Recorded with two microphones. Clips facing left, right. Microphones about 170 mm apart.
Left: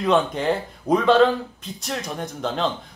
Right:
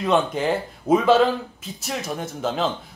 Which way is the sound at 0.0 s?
Centre (ahead or behind).